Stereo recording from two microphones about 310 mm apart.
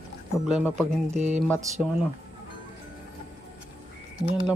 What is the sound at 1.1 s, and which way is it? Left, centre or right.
Speech, right.